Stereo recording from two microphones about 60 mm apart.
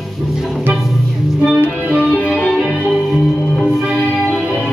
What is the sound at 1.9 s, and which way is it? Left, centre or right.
Music, centre.